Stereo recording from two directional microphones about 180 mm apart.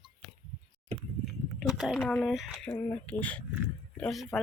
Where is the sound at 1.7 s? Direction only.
Centre (ahead or behind).